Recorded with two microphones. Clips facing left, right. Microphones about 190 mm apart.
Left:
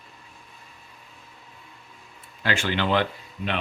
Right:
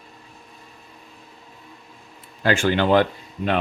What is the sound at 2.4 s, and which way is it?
Speech, 45° right (ahead or behind).